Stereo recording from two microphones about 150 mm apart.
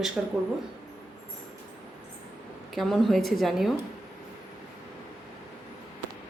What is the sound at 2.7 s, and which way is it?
A woman's voice, centre (ahead or behind).